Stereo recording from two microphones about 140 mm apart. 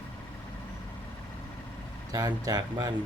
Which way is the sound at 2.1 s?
25° right (ahead or behind).